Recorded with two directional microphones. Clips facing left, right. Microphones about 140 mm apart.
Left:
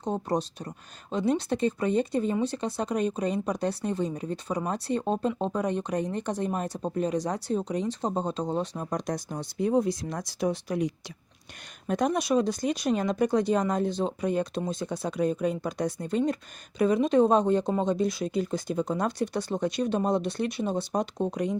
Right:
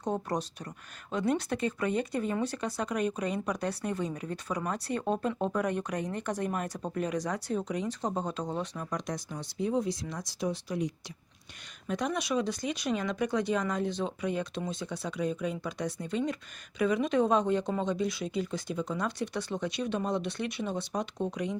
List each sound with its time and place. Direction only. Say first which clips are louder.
0.0 s speech: left 3 dB; 25° left (ahead or behind); by 10.9 s 60° left (ahead or behind)
11.9 s speech: left 6 dB; 45° left (ahead or behind)